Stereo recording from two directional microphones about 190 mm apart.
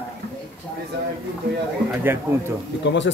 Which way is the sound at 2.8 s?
70° left (ahead or behind).